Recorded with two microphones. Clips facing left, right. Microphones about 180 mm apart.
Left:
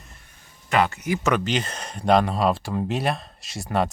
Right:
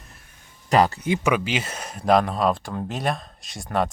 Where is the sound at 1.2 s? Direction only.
5° right (ahead or behind).